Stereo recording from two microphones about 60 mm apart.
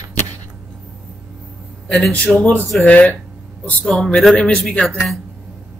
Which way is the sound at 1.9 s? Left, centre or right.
Centre.